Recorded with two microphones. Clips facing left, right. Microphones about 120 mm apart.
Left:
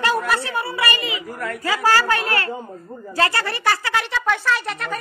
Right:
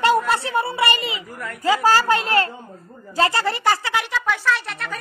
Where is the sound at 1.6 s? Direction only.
15° right (ahead or behind).